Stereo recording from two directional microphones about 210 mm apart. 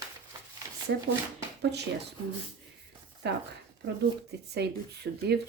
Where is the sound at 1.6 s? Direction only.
55° right (ahead or behind).